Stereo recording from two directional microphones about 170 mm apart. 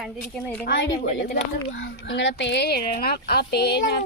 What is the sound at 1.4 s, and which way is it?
Speech, 90° left.